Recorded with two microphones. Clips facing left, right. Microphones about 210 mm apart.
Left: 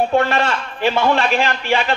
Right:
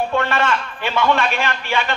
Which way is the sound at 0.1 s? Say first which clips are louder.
Left 3 dB; 35° left (ahead or behind).